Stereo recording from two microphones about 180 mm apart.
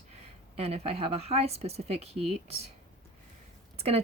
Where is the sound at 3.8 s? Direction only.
35° right (ahead or behind).